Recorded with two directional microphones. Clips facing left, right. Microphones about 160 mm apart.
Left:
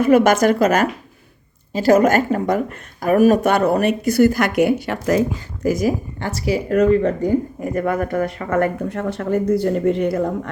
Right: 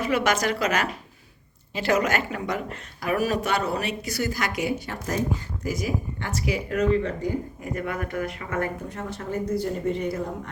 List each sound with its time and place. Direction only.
0.0 s speech: 50° left (ahead or behind); by 5.2 s 85° left
5.6 s speech: 45° left (ahead or behind)
6.7 s speech: 50° left (ahead or behind); by 10.5 s 75° left (ahead or behind)